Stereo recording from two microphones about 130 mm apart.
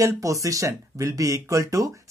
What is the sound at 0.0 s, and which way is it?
Speech, 25° right (ahead or behind).